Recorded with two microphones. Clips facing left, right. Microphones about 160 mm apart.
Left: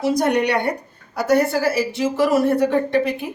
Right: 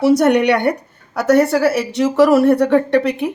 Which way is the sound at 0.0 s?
75° right (ahead or behind).